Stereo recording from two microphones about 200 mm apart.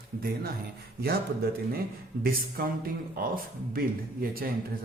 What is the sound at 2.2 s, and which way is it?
A man's voice, 45° right (ahead or behind).